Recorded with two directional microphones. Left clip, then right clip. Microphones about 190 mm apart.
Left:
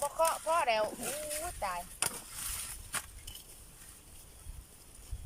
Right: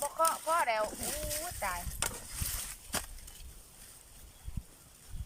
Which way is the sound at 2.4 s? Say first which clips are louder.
Right 2 dB; 30° right (ahead or behind).